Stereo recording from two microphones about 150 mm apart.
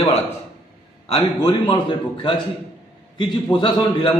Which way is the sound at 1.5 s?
35° left (ahead or behind).